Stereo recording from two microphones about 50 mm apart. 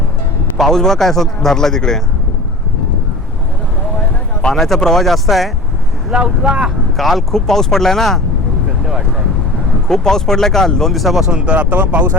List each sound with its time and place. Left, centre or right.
0.5 s speech: centre
4.4 s speech: centre
6.1 s speech: centre
6.9 s speech: centre
9.9 s speech: centre
11.3 s speech: right